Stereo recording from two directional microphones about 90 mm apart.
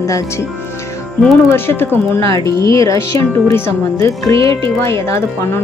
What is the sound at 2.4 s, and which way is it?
Speech, 35° left (ahead or behind).